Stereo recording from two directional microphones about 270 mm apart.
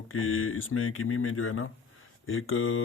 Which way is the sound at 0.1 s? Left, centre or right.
Left.